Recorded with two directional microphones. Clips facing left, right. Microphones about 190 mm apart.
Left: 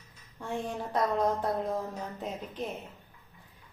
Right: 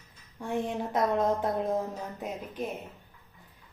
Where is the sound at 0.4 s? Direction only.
20° right (ahead or behind).